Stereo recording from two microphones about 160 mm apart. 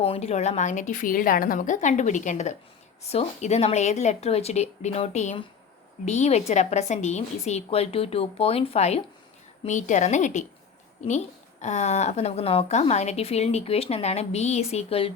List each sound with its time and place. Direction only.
0.0 s a woman's voice: 40° left (ahead or behind)